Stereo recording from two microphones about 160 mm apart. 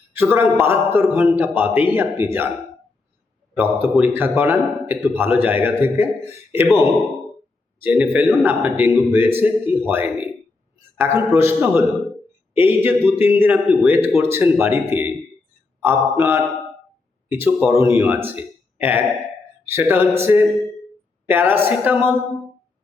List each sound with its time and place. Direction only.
0.1 s a man's voice: 15° right (ahead or behind)
3.5 s a man's voice: 10° right (ahead or behind)